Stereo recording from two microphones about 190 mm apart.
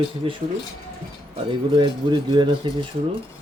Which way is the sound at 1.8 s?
25° right (ahead or behind).